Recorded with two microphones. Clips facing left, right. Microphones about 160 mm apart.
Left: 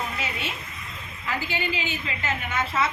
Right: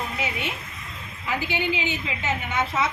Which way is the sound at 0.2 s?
15° right (ahead or behind).